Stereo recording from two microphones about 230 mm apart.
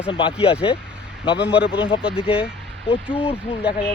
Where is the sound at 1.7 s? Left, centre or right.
Left.